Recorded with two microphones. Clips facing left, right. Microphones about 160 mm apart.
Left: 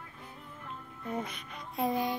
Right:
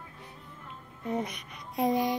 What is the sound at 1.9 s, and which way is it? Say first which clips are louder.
Child singing: right 5 dB; 75° right (ahead or behind).